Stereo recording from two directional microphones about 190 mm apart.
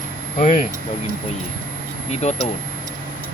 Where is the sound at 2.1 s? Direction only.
35° left (ahead or behind).